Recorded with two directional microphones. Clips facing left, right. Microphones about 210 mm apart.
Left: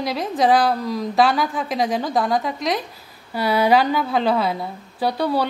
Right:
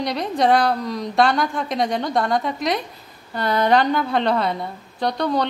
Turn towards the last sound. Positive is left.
turn(degrees=5)  # may be behind; listen again after turning